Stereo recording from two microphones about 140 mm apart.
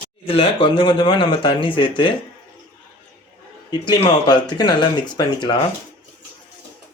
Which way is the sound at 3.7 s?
30° left (ahead or behind).